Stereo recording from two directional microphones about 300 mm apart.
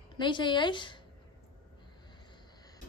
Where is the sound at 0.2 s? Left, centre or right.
Centre.